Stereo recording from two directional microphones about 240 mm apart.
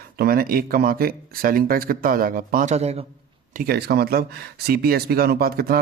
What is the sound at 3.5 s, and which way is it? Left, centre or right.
Speech, right.